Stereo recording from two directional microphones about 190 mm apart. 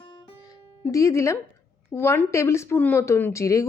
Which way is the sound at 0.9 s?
15° left (ahead or behind).